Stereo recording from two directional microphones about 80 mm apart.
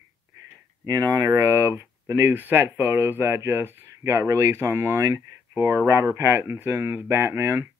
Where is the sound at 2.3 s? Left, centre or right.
Right.